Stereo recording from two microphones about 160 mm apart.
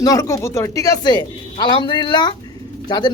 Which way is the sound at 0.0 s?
20° left (ahead or behind).